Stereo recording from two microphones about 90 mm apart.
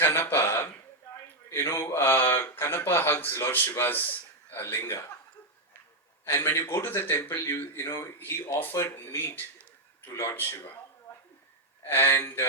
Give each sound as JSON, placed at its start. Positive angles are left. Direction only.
{"t": 0.0, "sound": "a sound", "side_deg": 20}
{"t": 1.5, "sound": "speech", "side_deg": 30}
{"t": 6.2, "sound": "speech", "side_deg": 30}
{"t": 8.2, "sound": "speech", "side_deg": 25}
{"t": 11.1, "sound": "a sound", "side_deg": 25}
{"t": 11.9, "sound": "speech", "side_deg": 25}